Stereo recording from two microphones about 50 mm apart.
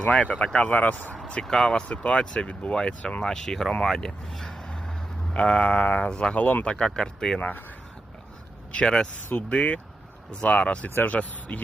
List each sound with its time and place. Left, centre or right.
0.0 s speech: left
1.3 s speech: centre
1.9 s speech: left
3.2 s speech: centre; by 6.1 s left
6.1 s speech: centre
7.3 s speech: left
8.8 s speech: centre
9.5 s speech: left